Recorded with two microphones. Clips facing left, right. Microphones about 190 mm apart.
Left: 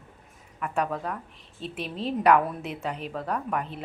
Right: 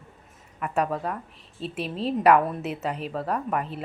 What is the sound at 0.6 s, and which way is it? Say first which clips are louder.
Speech: right 2 dB; 10° right (ahead or behind).